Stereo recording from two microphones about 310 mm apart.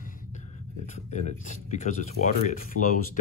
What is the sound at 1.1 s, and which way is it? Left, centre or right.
Speech, left.